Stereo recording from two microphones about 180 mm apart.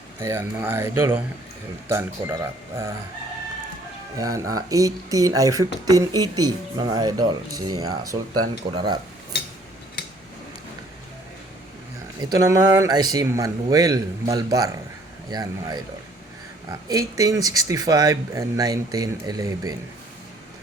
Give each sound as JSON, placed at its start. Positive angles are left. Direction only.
{"t": 0.2, "sound": "speech", "side_deg": -15}
{"t": 4.2, "sound": "speech", "side_deg": -20}
{"t": 12.2, "sound": "speech", "side_deg": -20}
{"t": 16.9, "sound": "speech", "side_deg": -20}